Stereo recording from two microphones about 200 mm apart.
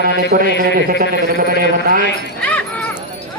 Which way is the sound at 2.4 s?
5° left (ahead or behind).